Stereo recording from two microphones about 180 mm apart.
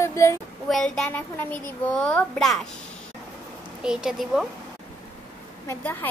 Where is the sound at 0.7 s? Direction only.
5° left (ahead or behind).